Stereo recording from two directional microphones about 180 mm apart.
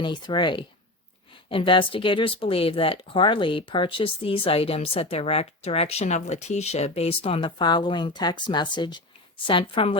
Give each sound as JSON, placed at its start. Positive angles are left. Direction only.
{"t": 0.0, "sound": "speech", "side_deg": 25}